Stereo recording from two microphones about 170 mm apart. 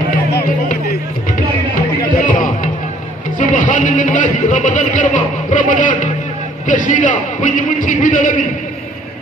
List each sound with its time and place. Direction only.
2.3 s music: 50° left (ahead or behind)
3.3 s speech: 50° left (ahead or behind)